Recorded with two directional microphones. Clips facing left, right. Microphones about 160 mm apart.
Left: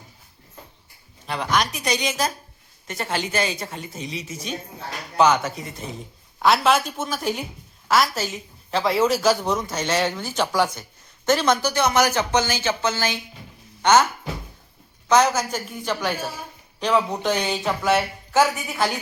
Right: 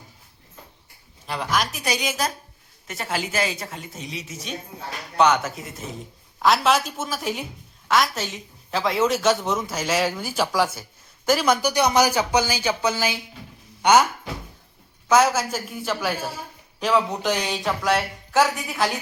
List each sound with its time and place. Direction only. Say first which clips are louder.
1.3 s a man's voice: left 2 dB; centre (ahead or behind)
15.1 s a man's voice: even; 5° right (ahead or behind)